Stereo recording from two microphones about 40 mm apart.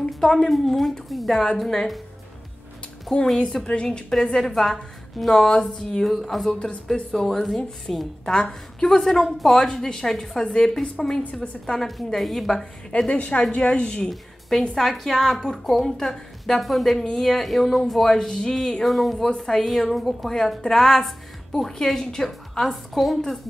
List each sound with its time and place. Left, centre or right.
0.1 s a woman's voice: centre
3.3 s a woman's voice: centre
3.6 s a woman's voice: left; by 8.1 s centre
8.3 s a woman's voice: centre
11.8 s a woman's voice: centre
13.1 s a woman's voice: left
14.8 s a woman's voice: centre
22.9 s a woman's voice: centre